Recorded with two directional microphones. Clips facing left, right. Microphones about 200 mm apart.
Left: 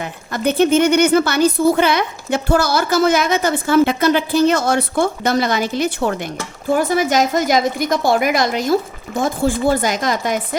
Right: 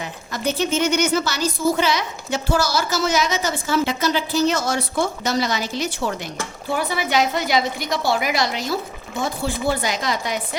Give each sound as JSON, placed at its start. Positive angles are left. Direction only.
{"t": 0.0, "sound": "a woman's voice", "side_deg": 55}